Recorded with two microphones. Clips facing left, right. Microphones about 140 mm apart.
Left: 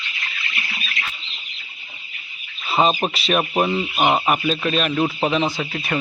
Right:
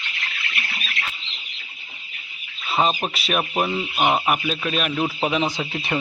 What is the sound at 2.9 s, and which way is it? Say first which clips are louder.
Speech: left 3 dB; 20° left (ahead or behind).